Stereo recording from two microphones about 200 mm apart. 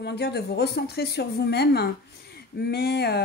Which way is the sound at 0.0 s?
55° left (ahead or behind).